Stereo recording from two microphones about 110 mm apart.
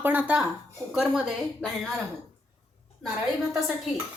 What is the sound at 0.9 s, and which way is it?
Speech, centre (ahead or behind).